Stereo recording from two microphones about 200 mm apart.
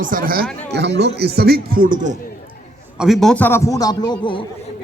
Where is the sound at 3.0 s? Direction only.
Centre (ahead or behind); by 4.4 s 25° left (ahead or behind).